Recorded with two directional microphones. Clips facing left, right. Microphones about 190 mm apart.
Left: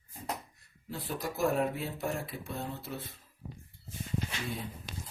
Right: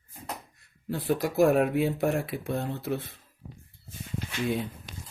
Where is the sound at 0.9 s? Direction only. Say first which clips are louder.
Right 11 dB; 70° right (ahead or behind).